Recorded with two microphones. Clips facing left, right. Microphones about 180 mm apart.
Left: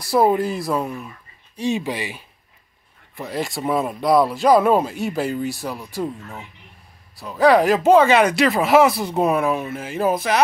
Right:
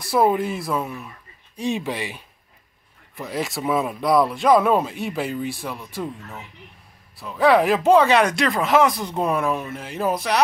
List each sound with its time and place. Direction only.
0.2 s speech: centre (ahead or behind)
5.7 s speech: 35° left (ahead or behind)
7.2 s speech: centre (ahead or behind)